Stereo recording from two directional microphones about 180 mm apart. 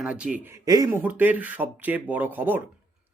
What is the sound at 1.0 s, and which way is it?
Speech, 10° right (ahead or behind).